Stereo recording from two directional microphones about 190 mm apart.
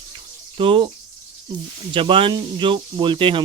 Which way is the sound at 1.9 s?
25° right (ahead or behind).